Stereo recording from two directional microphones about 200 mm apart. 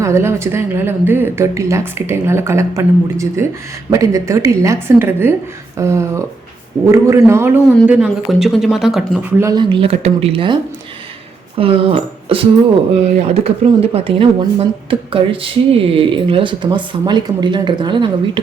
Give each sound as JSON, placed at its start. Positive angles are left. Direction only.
{"t": 0.0, "sound": "a man's voice", "side_deg": -15}
{"t": 9.4, "sound": "speech", "side_deg": -20}